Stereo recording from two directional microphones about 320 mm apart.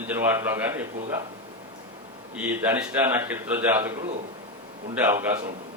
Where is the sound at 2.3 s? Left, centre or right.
Centre.